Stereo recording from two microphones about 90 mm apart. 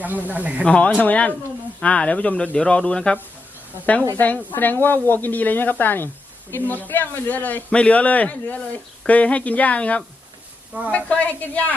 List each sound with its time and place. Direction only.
0.0 s speech: 20° right (ahead or behind)
0.6 s a man's voice: 15° left (ahead or behind)
4.2 s a man's voice: 20° left (ahead or behind)